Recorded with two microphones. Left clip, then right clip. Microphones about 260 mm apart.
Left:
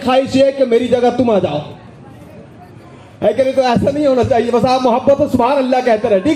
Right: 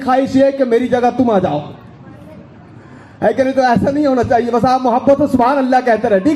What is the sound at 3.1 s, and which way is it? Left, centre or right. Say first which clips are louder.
A man's voice: left 1 dB; right.